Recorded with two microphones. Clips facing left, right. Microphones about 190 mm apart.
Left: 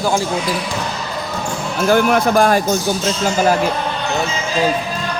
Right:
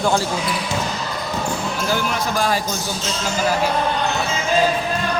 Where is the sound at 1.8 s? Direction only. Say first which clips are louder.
Left 11 dB; 55° left (ahead or behind).